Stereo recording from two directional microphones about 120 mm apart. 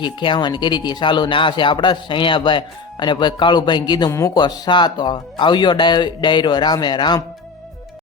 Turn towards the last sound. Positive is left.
turn(degrees=40)  # may be behind; listen again after turning